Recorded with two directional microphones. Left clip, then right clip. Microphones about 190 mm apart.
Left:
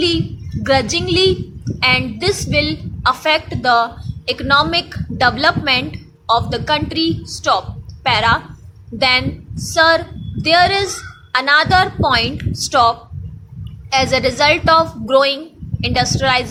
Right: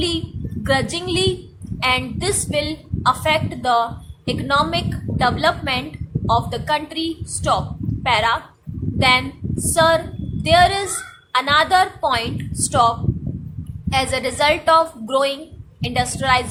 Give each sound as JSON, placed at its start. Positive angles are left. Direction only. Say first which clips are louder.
{"t": 0.6, "sound": "a woman's voice", "louder": "left 5 dB", "side_deg": 20}